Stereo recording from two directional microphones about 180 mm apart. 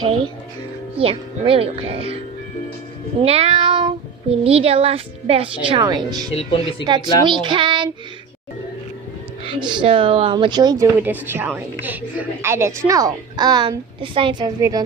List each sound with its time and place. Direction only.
0.0 s speech: 25° right (ahead or behind)
3.2 s speech: 35° right (ahead or behind)
9.4 s speech: 25° right (ahead or behind)
11.0 s a woman's voice: 10° right (ahead or behind); by 14.5 s 30° right (ahead or behind)